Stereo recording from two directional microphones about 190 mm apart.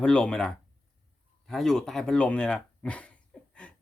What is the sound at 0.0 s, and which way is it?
Speech, 5° left (ahead or behind).